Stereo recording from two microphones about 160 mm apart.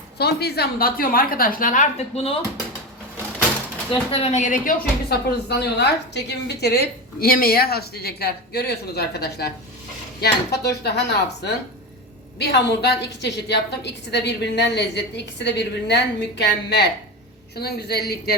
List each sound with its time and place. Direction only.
0.2 s a woman's voice: 90° left; by 2.3 s 40° left (ahead or behind)
4.1 s a woman's voice: 40° left (ahead or behind); by 18.3 s 85° left